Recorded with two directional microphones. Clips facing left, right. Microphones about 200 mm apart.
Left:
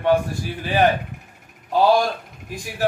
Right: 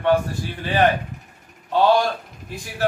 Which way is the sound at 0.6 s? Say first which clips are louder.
Even; 10° left (ahead or behind).